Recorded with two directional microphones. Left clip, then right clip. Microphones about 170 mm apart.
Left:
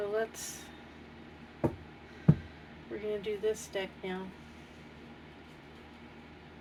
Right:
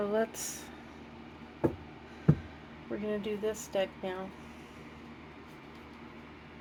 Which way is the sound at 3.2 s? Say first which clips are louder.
Left 1 dB; 55° right (ahead or behind).